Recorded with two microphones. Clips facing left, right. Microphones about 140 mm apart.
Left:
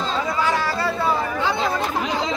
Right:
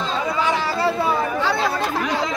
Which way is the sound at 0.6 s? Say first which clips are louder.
Right 2 dB; 20° right (ahead or behind).